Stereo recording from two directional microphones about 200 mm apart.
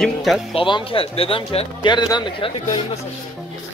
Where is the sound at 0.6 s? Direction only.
25° left (ahead or behind).